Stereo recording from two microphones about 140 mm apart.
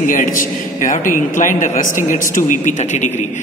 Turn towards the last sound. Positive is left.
turn(degrees=60)  # may be behind; listen again after turning